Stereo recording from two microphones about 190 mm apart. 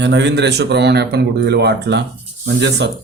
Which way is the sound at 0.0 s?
65° right (ahead or behind).